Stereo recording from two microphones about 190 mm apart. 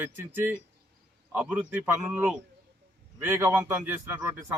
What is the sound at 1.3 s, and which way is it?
A man's voice, 10° right (ahead or behind).